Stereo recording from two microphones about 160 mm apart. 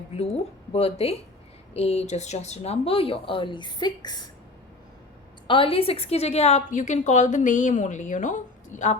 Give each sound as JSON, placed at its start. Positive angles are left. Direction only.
{"t": 0.1, "sound": "speech", "side_deg": 40}
{"t": 5.5, "sound": "a woman's voice", "side_deg": 35}